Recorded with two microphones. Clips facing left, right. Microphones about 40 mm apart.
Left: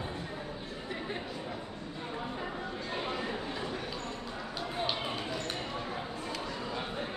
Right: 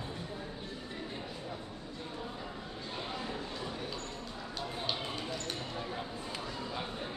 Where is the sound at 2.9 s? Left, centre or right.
Left.